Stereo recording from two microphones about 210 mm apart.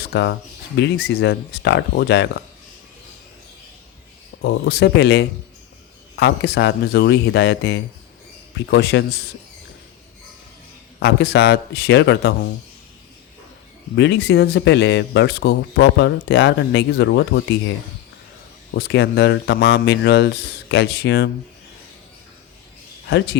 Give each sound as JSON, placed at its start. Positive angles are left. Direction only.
{"t": 0.0, "sound": "speech", "side_deg": 55}
{"t": 4.4, "sound": "speech", "side_deg": 50}
{"t": 11.0, "sound": "speech", "side_deg": 50}
{"t": 13.9, "sound": "speech", "side_deg": 55}
{"t": 18.7, "sound": "speech", "side_deg": 55}
{"t": 23.0, "sound": "speech", "side_deg": 55}